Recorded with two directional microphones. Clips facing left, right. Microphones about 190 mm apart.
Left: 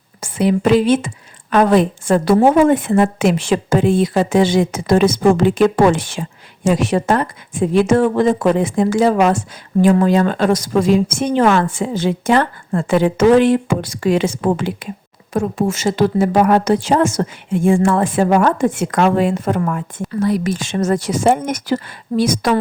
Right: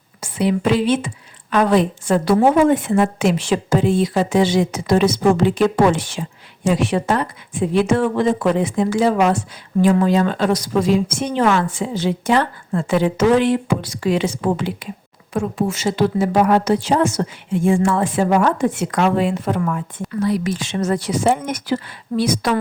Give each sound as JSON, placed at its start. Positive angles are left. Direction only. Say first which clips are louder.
{"t": 0.2, "sound": "a woman's voice", "louder": "left 3 dB", "side_deg": 45}